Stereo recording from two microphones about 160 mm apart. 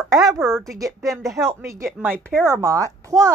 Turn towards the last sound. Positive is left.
turn(degrees=-20)  # may be behind; listen again after turning